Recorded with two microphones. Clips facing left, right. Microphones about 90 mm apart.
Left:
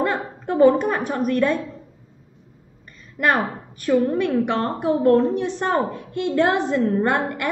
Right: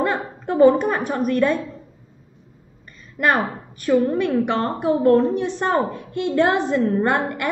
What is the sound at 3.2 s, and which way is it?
A woman's voice, 20° right (ahead or behind).